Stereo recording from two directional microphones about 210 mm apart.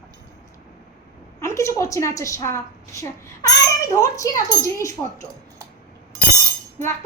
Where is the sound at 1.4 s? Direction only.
15° left (ahead or behind).